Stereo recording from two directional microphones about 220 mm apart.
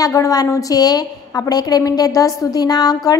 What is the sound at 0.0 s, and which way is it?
A woman's voice, 15° left (ahead or behind).